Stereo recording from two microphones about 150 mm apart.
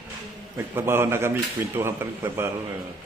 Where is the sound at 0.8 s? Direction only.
15° right (ahead or behind).